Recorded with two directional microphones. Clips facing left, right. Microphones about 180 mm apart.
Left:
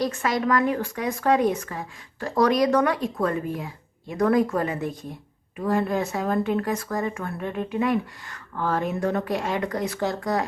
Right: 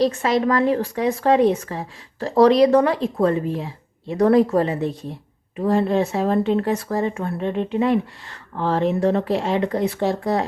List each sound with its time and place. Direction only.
0.0 s a woman's voice: 30° right (ahead or behind)